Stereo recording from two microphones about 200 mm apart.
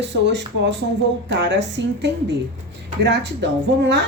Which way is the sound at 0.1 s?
60° right (ahead or behind).